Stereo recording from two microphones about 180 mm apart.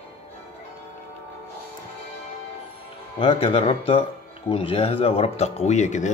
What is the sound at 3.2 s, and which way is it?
Speech, 30° left (ahead or behind).